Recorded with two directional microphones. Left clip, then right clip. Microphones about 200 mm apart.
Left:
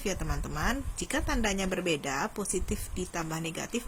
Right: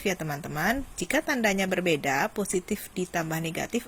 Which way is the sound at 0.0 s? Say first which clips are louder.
Right 5 dB; 20° right (ahead or behind).